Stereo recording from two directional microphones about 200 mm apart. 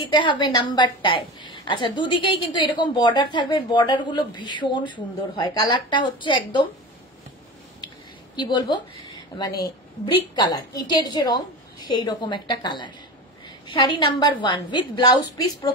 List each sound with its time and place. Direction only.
0.0 s a woman's voice: 25° left (ahead or behind)
8.4 s a woman's voice: 20° left (ahead or behind)